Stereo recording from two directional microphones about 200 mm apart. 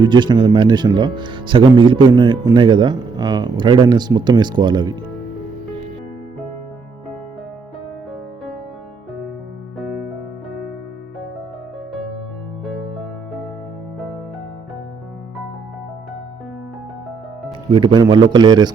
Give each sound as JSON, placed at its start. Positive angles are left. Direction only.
{"t": 0.0, "sound": "speech", "side_deg": -20}
{"t": 9.7, "sound": "music", "side_deg": 0}
{"t": 17.7, "sound": "speech", "side_deg": -25}